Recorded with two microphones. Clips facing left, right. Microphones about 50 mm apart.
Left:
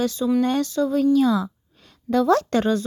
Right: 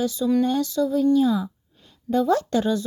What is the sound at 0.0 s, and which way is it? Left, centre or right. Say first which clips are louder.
A woman's voice: left 1 dB; left.